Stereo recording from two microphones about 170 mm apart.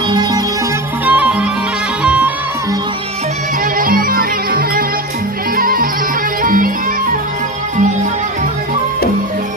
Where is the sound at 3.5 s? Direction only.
55° right (ahead or behind).